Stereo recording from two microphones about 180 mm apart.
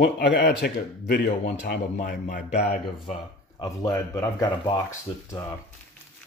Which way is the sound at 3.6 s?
15° left (ahead or behind).